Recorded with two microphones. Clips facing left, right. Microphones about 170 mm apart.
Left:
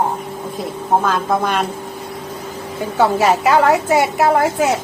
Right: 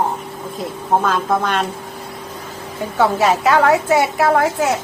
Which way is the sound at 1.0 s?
5° left (ahead or behind).